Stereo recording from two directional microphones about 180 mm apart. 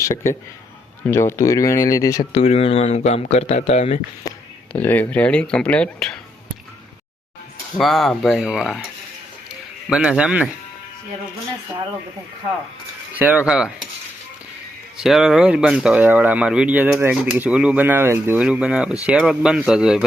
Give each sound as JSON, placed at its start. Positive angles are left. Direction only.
{"t": 0.0, "sound": "speech", "side_deg": 15}
{"t": 2.3, "sound": "speech", "side_deg": 35}
{"t": 4.7, "sound": "speech", "side_deg": 10}
{"t": 7.8, "sound": "speech", "side_deg": 0}
{"t": 9.9, "sound": "speech", "side_deg": -5}
{"t": 13.1, "sound": "speech", "side_deg": -10}
{"t": 14.9, "sound": "speech", "side_deg": 0}